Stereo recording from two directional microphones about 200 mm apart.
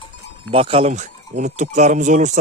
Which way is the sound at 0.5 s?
30° right (ahead or behind).